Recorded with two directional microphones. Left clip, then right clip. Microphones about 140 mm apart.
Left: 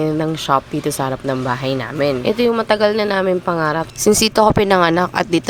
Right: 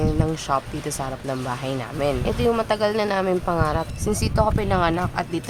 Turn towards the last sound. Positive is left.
turn(degrees=65)  # may be behind; listen again after turning